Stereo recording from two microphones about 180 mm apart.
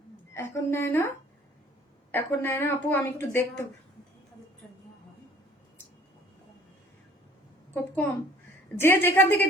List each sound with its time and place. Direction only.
0.3 s a woman's voice: 15° left (ahead or behind)
2.1 s a woman's voice: 10° left (ahead or behind)
4.6 s a sound: centre (ahead or behind)
7.7 s a woman's voice: 10° left (ahead or behind)